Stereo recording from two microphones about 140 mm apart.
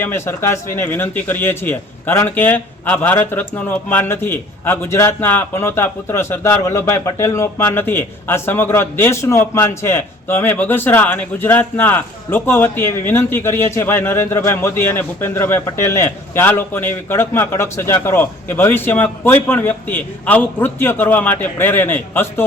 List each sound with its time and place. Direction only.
0.0 s speech: 15° left (ahead or behind)